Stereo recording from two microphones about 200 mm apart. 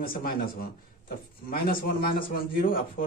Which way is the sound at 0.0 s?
45° left (ahead or behind).